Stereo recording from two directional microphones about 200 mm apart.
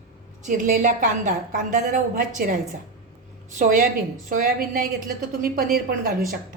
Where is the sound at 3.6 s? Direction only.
40° right (ahead or behind).